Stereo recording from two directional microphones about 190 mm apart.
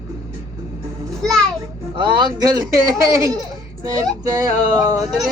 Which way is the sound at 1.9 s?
25° right (ahead or behind).